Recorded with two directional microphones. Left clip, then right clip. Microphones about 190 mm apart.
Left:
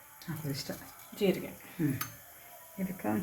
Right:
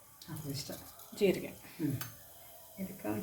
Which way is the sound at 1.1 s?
Centre (ahead or behind).